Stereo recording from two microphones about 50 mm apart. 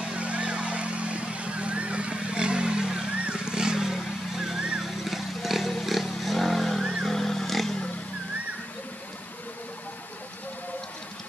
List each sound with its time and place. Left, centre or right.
0.1 s vehicle: right; by 7.1 s centre
7.1 s wild animals: centre